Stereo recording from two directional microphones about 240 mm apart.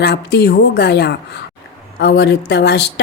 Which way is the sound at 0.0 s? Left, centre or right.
Left.